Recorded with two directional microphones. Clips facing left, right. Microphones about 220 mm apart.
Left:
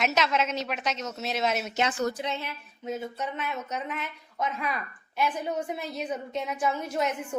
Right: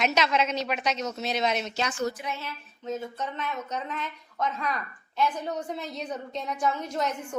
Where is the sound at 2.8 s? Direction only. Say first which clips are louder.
Even; 10° left (ahead or behind).